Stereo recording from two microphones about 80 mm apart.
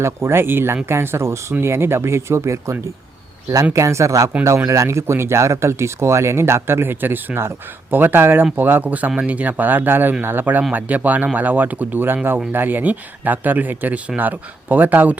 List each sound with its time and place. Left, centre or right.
0.0 s speech: right